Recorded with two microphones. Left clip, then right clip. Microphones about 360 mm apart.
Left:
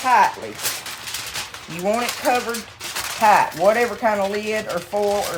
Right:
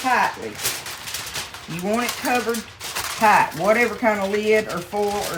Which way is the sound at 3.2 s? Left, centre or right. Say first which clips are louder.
Left 2 dB; centre.